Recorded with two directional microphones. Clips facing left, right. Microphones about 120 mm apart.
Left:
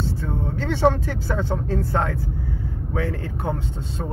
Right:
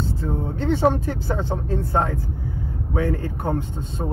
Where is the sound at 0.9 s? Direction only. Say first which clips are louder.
Right 1 dB; 20° right (ahead or behind).